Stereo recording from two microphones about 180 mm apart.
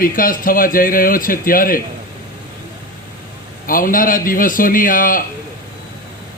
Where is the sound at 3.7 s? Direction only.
50° left (ahead or behind).